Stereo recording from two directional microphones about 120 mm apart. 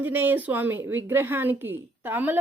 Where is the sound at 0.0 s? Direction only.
15° right (ahead or behind).